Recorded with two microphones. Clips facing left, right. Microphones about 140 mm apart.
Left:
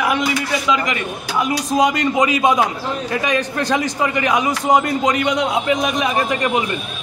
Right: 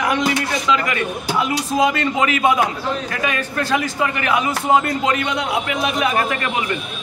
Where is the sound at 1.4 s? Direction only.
20° left (ahead or behind).